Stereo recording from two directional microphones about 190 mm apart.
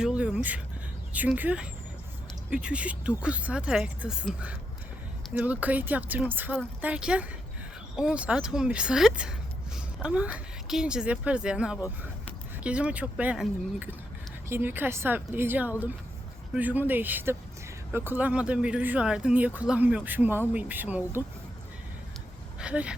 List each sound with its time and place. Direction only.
0.0 s a sound: 5° right (ahead or behind)
1.1 s a woman's voice: 10° right (ahead or behind)
22.6 s speech: 5° right (ahead or behind)